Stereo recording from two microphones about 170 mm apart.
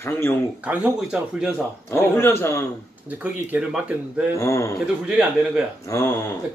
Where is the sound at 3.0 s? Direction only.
10° right (ahead or behind).